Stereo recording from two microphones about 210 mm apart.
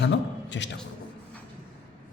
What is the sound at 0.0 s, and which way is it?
Speech, 55° left (ahead or behind).